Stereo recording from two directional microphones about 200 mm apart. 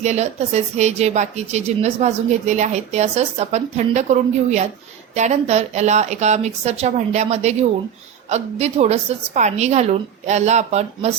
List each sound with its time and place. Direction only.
0.0 s a woman's voice: 35° right (ahead or behind)